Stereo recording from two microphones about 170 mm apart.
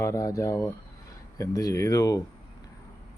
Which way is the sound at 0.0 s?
20° left (ahead or behind).